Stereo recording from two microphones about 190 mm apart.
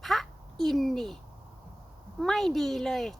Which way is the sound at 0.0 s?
Centre (ahead or behind).